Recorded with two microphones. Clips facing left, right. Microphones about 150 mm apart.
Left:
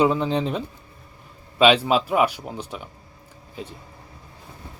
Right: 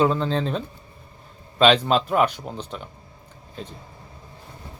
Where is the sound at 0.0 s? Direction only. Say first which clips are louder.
Left 1 dB; 15° left (ahead or behind).